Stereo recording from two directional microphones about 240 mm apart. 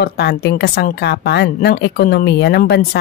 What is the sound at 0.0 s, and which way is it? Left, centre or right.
A woman's voice, left.